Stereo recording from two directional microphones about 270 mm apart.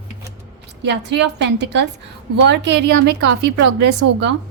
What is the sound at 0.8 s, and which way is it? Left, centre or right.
A woman's voice, right.